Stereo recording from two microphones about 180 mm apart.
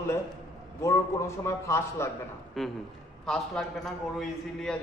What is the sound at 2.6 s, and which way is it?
A man's voice, centre (ahead or behind).